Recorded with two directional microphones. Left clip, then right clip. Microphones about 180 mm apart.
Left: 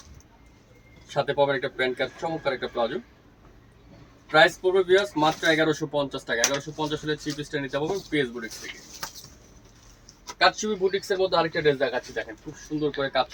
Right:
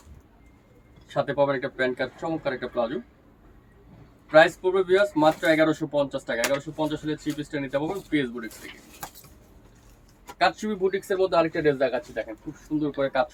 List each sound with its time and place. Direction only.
1.0 s speech: centre (ahead or behind)
4.3 s speech: 5° right (ahead or behind)
10.6 s speech: 5° right (ahead or behind)